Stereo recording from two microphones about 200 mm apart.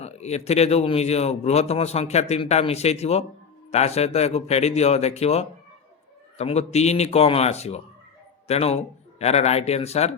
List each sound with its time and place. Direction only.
0.0 s a man's voice: 35° left (ahead or behind)